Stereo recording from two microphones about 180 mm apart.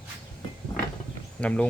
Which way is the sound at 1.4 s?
5° left (ahead or behind).